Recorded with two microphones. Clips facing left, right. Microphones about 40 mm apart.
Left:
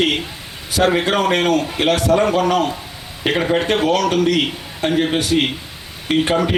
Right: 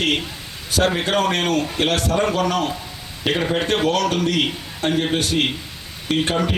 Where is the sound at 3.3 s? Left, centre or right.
Centre.